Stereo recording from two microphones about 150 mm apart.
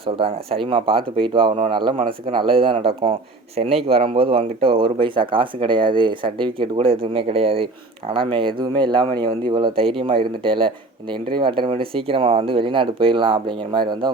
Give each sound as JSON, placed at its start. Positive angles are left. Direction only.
{"t": 0.0, "sound": "a man's voice", "side_deg": -40}